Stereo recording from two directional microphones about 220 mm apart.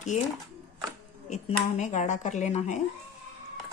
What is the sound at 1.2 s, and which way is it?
Speech, 30° left (ahead or behind).